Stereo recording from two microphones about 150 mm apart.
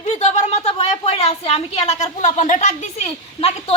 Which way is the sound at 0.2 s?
50° left (ahead or behind).